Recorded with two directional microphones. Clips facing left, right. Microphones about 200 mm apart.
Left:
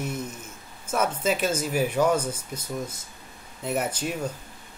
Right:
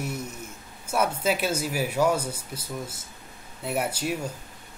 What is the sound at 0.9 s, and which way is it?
Speech, 10° right (ahead or behind).